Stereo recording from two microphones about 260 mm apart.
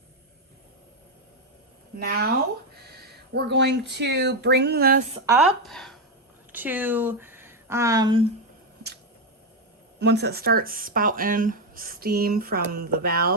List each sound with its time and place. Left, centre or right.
2.0 s speech: right
3.3 s speech: right
5.6 s speech: centre
10.0 s speech: right